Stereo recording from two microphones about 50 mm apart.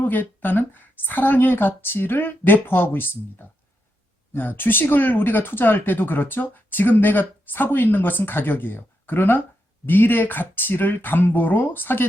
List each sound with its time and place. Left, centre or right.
0.0 s speech: left